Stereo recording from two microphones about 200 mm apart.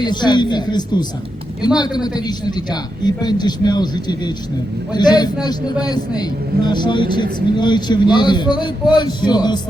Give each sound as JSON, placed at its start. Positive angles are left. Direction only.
{"t": 0.0, "sound": "speech", "side_deg": 20}